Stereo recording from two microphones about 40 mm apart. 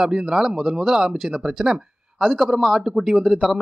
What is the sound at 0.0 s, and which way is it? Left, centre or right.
Speech, centre.